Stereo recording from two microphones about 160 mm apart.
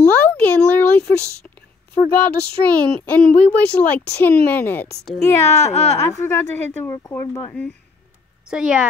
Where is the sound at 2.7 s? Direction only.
10° left (ahead or behind).